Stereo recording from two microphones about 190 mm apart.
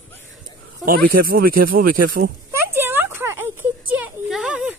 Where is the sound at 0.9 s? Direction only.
50° right (ahead or behind).